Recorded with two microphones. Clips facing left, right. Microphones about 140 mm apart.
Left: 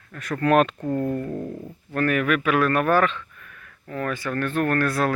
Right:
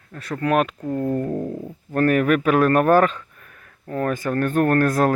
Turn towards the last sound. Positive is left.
turn(degrees=-45)  # may be behind; listen again after turning